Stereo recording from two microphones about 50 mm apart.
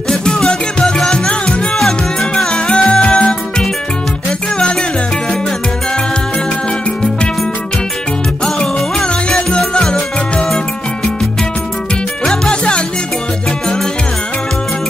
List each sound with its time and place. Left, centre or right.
0.1 s music: centre
8.5 s music: centre
12.3 s music: centre